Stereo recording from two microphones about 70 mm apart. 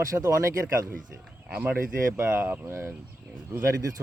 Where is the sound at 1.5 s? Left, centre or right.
Centre.